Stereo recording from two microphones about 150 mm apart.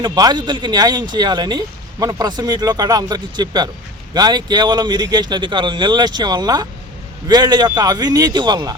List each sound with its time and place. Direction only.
0.0 s speech: 25° right (ahead or behind)